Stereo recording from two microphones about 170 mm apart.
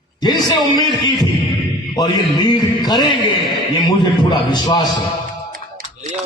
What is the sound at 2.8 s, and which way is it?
Speech, 25° left (ahead or behind).